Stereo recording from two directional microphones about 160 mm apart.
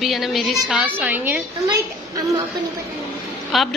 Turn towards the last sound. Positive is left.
turn(degrees=0)  # may be behind; listen again after turning